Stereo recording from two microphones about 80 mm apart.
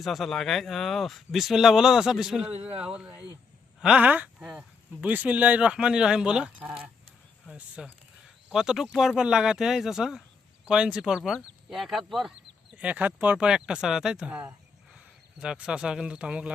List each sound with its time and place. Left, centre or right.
0.0 s speech: centre
12.7 s speech: centre
13.5 s speech: centre